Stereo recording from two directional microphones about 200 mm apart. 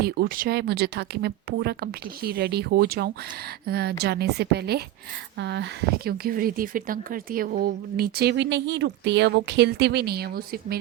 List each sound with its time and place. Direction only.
0.0 s speech: 50° right (ahead or behind)
6.1 s speech: 50° right (ahead or behind)